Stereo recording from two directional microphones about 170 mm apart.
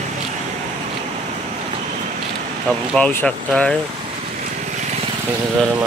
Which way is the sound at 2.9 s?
10° left (ahead or behind).